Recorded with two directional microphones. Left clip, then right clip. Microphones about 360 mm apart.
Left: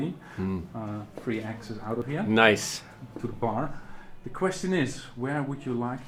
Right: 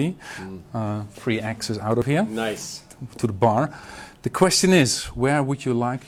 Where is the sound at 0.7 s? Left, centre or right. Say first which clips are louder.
Right 8 dB; right.